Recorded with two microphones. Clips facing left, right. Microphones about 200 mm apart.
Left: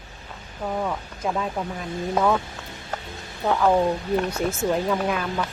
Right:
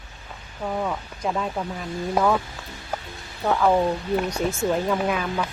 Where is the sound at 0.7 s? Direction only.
Centre (ahead or behind).